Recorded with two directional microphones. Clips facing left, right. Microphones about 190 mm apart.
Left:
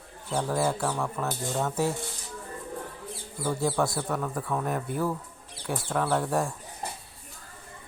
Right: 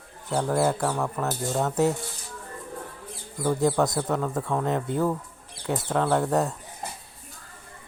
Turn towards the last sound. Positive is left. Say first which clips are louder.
# right 3 dB
turn(degrees=-20)  # may be behind; listen again after turning